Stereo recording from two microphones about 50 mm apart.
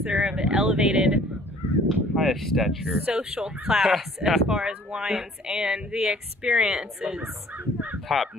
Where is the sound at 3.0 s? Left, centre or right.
Right.